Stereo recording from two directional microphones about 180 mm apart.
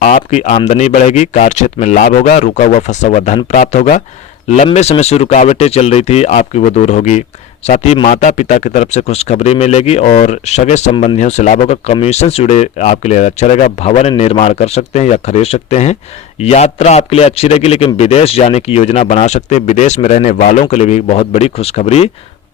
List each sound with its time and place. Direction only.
0.0 s a man's voice: 40° left (ahead or behind)